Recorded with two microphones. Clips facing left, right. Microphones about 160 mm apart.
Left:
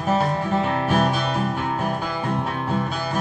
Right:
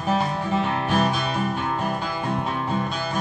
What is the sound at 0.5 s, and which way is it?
Music, centre (ahead or behind).